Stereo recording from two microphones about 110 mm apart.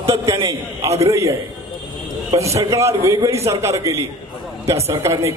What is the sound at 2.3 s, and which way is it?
A man's voice, 25° right (ahead or behind).